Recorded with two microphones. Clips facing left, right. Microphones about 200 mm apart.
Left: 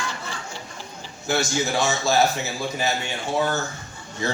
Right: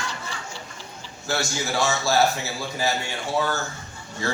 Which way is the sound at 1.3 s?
20° left (ahead or behind).